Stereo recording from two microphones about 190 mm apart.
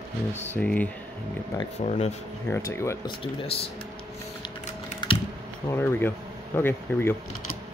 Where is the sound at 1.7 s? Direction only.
35° left (ahead or behind).